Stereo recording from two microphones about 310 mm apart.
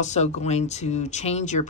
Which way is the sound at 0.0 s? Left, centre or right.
Left.